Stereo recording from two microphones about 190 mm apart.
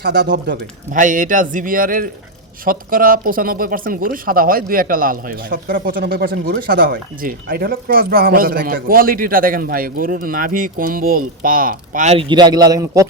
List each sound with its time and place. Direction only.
0.0 s speech: 65° right (ahead or behind)
0.5 s speech: 45° right (ahead or behind); by 13.1 s 15° right (ahead or behind)